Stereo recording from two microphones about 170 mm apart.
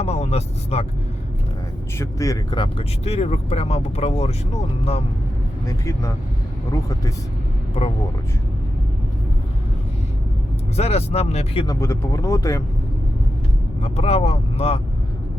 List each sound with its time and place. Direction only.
0.0 s speech: 40° left (ahead or behind)
2.0 s speech: 20° left (ahead or behind); by 5.0 s 35° left (ahead or behind)
5.6 s speech: 20° left (ahead or behind)
10.8 s speech: 40° left (ahead or behind)
11.6 s speech: 20° left (ahead or behind)
13.8 s speech: 35° left (ahead or behind)